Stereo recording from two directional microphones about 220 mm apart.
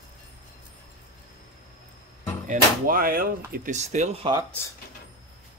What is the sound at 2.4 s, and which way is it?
Speech, 35° right (ahead or behind).